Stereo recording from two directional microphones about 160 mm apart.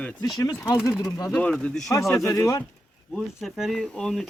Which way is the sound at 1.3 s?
5° left (ahead or behind).